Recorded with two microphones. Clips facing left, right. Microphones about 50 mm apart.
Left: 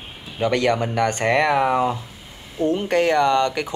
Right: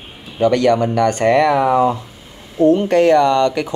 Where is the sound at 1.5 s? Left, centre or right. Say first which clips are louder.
Right 4 dB; centre.